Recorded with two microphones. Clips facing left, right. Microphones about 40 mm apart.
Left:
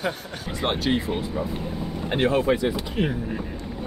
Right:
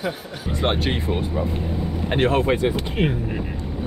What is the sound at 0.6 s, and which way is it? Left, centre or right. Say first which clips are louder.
Speech: right 1 dB; right.